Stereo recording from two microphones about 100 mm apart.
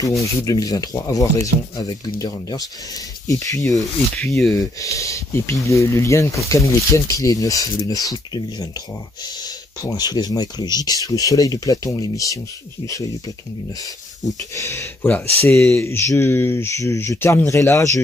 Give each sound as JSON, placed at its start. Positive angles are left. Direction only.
{"t": 0.0, "sound": "speech", "side_deg": 30}
{"t": 4.2, "sound": "speech", "side_deg": 5}
{"t": 4.5, "sound": "speech", "side_deg": 35}
{"t": 14.2, "sound": "speech", "side_deg": 30}
{"t": 15.0, "sound": "speech", "side_deg": 15}
{"t": 15.7, "sound": "speech", "side_deg": 25}